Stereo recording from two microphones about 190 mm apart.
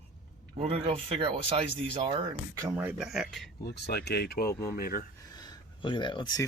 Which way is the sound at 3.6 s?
60° left (ahead or behind).